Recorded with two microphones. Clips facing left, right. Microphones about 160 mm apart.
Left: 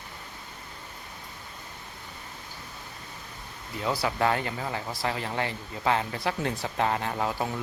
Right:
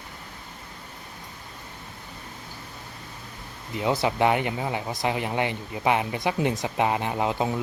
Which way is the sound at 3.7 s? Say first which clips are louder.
Right 4 dB; 20° right (ahead or behind).